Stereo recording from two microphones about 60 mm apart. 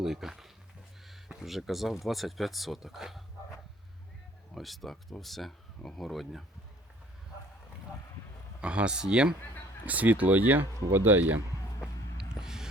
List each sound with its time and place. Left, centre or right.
0.0 s speech: centre
4.5 s speech: centre
8.6 s speech: centre
12.4 s a sound: centre